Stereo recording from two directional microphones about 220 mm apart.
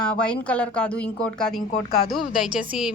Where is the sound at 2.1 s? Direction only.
40° left (ahead or behind).